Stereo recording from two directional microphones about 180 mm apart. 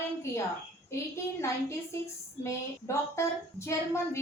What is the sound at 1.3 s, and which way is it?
A woman's voice, 15° left (ahead or behind).